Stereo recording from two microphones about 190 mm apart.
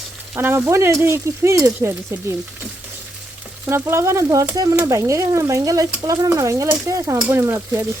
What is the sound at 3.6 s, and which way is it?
Speech, 15° right (ahead or behind).